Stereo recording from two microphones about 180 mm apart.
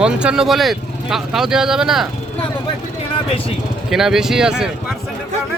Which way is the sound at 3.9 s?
Centre (ahead or behind).